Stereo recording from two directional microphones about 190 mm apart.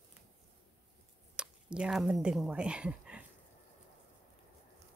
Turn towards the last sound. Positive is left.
turn(degrees=-5)  # may be behind; listen again after turning